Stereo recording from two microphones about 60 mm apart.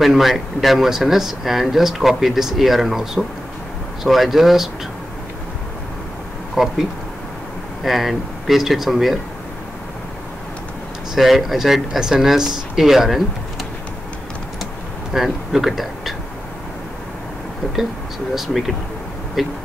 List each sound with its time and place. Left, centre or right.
0.0 s speech: centre
6.5 s speech: centre
11.1 s speech: centre
15.1 s speech: centre
18.3 s speech: centre